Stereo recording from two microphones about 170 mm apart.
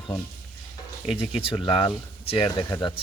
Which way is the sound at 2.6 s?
20° left (ahead or behind).